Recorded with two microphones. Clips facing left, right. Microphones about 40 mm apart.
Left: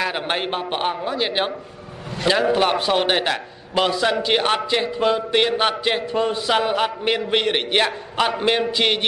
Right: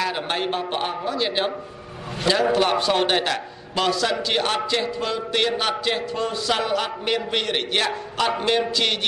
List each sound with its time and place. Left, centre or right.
0.0 s a man's voice: left
2.5 s a man's voice: centre